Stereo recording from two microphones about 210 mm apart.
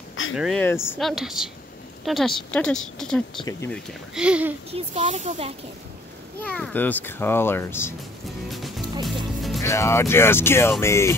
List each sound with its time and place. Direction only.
0.4 s a woman's voice: centre (ahead or behind)
4.6 s speech: 30° right (ahead or behind)
6.4 s a child's voice: 5° left (ahead or behind)
8.5 s music: centre (ahead or behind)
9.6 s a child's voice: 15° left (ahead or behind)